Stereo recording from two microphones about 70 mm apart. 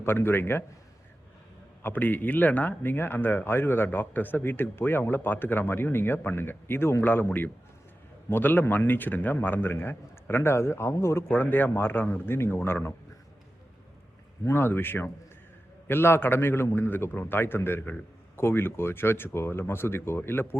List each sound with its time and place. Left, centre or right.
0.0 s speech: left
1.8 s speech: left
14.4 s speech: left